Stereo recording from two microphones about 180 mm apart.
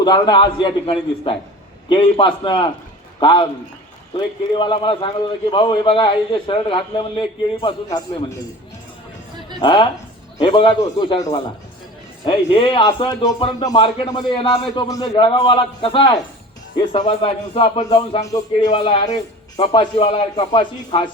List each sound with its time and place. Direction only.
0.0 s speech: 25° left (ahead or behind)
4.5 s speech: 25° left (ahead or behind)
9.6 s speech: 25° left (ahead or behind)